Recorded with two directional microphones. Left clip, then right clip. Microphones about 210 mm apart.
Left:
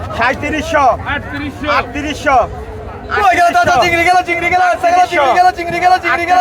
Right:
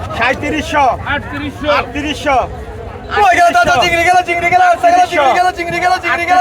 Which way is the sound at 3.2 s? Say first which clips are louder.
Right 1 dB; 30° right (ahead or behind).